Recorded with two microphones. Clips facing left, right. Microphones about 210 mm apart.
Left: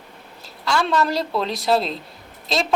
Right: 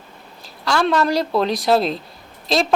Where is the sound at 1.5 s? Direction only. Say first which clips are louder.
Right 1 dB; centre (ahead or behind).